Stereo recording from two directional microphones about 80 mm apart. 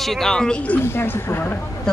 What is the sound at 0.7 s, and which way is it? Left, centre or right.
Speech, left.